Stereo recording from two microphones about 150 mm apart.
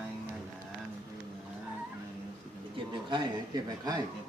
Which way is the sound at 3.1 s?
25° right (ahead or behind).